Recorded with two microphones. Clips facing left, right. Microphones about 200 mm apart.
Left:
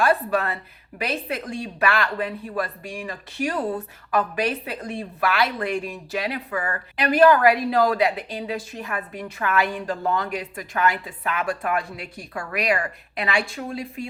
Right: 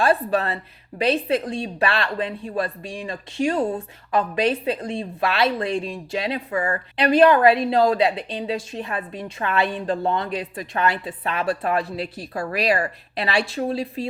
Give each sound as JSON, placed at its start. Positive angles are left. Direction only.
{"t": 0.0, "sound": "a woman's voice", "side_deg": -30}